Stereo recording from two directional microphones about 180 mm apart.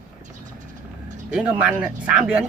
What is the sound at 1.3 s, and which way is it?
A man's voice, 5° right (ahead or behind).